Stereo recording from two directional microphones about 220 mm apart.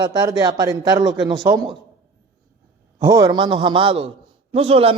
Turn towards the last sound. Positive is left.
turn(degrees=-25)  # may be behind; listen again after turning